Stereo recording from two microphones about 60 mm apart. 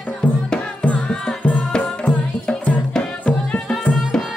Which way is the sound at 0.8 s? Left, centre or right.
Centre.